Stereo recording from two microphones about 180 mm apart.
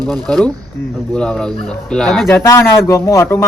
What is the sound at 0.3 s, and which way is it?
A man's voice, 5° left (ahead or behind).